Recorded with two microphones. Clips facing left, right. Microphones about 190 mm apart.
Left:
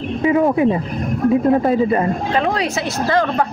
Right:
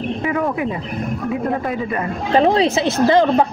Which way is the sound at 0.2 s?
25° left (ahead or behind).